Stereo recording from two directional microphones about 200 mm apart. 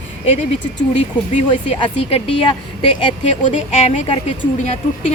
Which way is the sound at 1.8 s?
30° left (ahead or behind).